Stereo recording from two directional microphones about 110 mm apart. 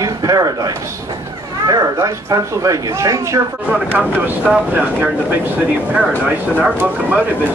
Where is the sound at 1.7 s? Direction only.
30° right (ahead or behind).